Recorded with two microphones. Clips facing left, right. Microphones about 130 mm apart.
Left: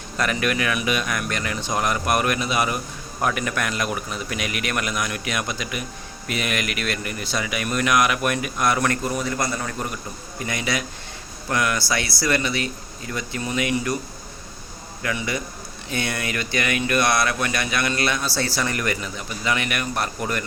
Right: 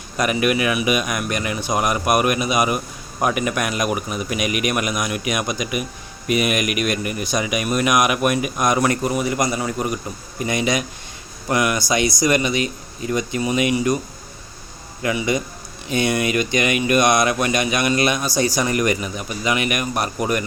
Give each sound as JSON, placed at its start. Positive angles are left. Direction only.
{"t": 0.2, "sound": "speech", "side_deg": -15}
{"t": 15.0, "sound": "speech", "side_deg": -20}